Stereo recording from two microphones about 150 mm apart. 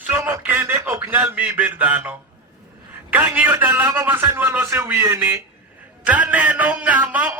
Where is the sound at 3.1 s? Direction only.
10° right (ahead or behind).